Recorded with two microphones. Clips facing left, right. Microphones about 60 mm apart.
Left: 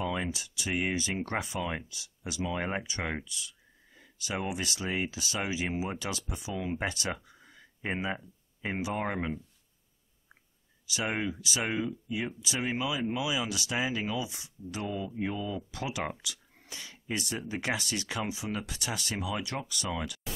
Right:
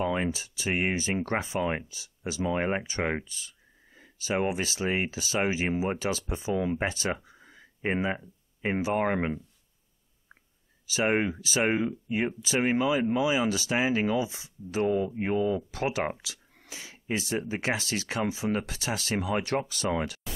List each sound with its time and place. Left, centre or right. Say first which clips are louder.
0.0 s speech: right 5 dB; right
8.9 s speech: right 7 dB; right
11.0 s speech: right 6 dB; right
16.9 s speech: right 5 dB; right